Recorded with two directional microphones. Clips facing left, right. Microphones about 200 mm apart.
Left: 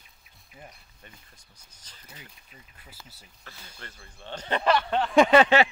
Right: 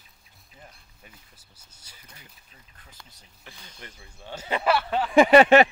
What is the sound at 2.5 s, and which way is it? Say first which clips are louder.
Speech: left 2 dB; 10° left (ahead or behind).